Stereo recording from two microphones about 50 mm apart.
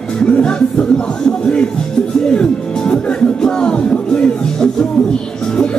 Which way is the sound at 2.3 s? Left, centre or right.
Centre.